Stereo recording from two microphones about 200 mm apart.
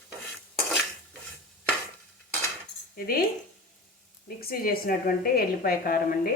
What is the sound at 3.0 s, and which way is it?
Speech, 50° left (ahead or behind).